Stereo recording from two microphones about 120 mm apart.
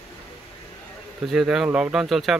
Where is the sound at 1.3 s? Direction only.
Centre (ahead or behind).